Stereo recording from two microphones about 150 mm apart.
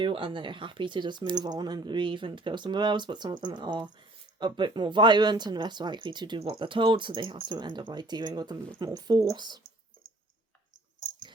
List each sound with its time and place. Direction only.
0.0 s speech: 35° right (ahead or behind)